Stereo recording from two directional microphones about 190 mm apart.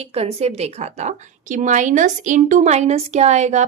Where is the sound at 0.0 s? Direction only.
35° right (ahead or behind).